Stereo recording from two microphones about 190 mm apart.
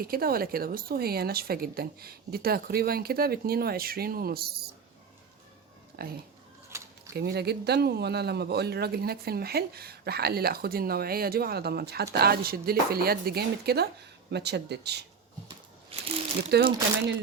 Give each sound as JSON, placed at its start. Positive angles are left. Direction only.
{"t": 0.0, "sound": "a woman's voice", "side_deg": -50}
{"t": 6.0, "sound": "a woman's voice", "side_deg": -55}
{"t": 6.7, "sound": "a sound", "side_deg": -15}
{"t": 7.2, "sound": "a woman's voice", "side_deg": -60}
{"t": 16.5, "sound": "a woman's voice", "side_deg": -55}